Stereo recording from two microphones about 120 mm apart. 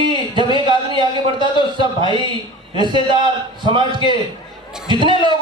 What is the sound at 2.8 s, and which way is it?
A man's voice, 40° right (ahead or behind).